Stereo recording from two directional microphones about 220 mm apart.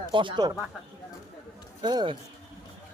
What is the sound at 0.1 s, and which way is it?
Speech, 20° right (ahead or behind).